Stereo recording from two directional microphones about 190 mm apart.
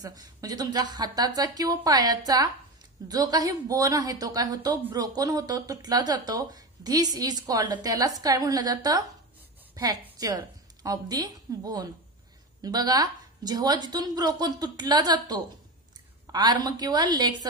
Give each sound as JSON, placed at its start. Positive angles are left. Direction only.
{"t": 0.0, "sound": "a woman's voice", "side_deg": -20}